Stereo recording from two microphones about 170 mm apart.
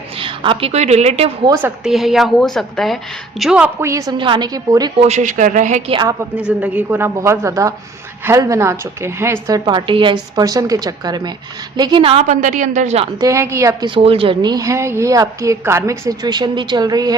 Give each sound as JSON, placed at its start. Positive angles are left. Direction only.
{"t": 0.2, "sound": "a woman's voice", "side_deg": -30}
{"t": 1.6, "sound": "a woman's voice", "side_deg": 0}
{"t": 4.9, "sound": "a woman's voice", "side_deg": -40}
{"t": 5.9, "sound": "a woman's voice", "side_deg": -25}
{"t": 6.6, "sound": "a woman's voice", "side_deg": -10}
{"t": 13.1, "sound": "a woman's voice", "side_deg": -20}
{"t": 13.9, "sound": "a woman's voice", "side_deg": -35}